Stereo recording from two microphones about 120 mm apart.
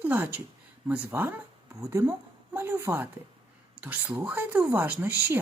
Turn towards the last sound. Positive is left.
turn(degrees=-20)  # may be behind; listen again after turning